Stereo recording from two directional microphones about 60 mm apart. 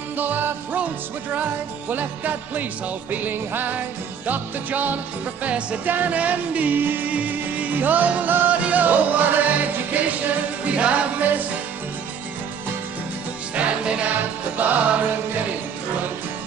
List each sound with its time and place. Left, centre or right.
0.2 s music: right
13.6 s music: centre